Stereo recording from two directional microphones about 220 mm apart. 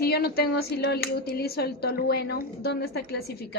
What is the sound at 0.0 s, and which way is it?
Speech, 45° left (ahead or behind).